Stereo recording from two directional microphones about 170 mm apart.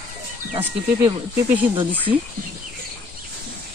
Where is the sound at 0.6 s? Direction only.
10° right (ahead or behind).